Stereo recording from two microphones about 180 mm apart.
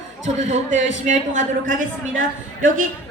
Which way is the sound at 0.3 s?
40° right (ahead or behind).